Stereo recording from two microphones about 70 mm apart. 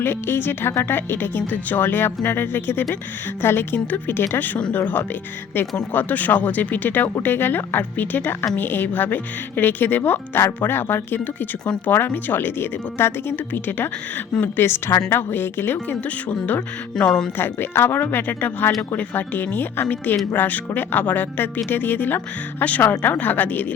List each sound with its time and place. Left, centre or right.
0.0 s speech: left